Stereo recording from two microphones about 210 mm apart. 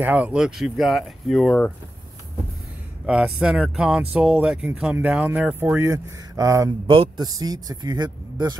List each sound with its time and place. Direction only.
0.0 s speech: 5° right (ahead or behind)
3.1 s speech: 5° right (ahead or behind); by 8.5 s 20° right (ahead or behind)